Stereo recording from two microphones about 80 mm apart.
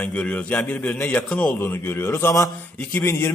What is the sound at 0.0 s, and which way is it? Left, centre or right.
A man's voice, centre.